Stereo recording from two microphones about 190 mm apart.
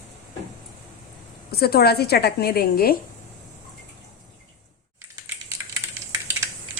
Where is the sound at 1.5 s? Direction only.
55° left (ahead or behind).